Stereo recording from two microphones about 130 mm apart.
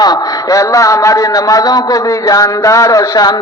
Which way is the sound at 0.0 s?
30° left (ahead or behind).